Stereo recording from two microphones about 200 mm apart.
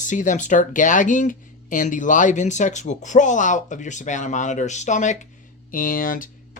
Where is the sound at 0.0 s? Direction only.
40° left (ahead or behind).